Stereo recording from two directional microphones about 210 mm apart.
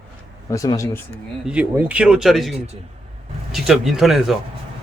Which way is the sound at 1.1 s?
5° right (ahead or behind).